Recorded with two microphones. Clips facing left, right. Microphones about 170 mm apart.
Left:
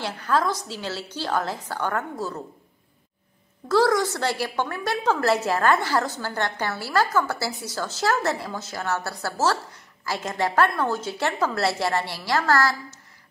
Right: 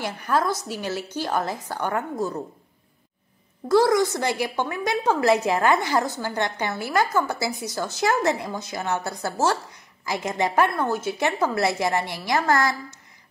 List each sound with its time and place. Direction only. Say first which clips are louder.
0.0 s a woman's voice: even; 15° right (ahead or behind)
3.6 s a woman's voice: right 2 dB; 15° right (ahead or behind)